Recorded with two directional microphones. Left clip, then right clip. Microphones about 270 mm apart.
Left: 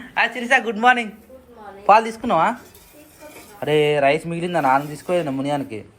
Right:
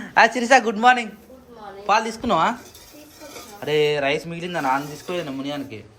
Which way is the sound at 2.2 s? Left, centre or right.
Centre.